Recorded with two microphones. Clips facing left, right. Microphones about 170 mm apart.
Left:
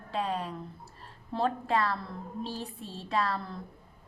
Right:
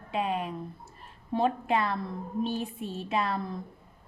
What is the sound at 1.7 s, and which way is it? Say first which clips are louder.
Speech: even; 20° right (ahead or behind).